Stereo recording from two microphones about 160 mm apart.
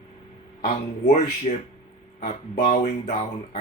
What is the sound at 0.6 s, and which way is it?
Speech, 45° left (ahead or behind).